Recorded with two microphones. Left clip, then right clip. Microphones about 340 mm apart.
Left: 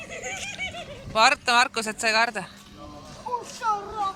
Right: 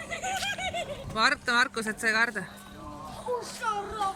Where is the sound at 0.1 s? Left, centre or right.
Right.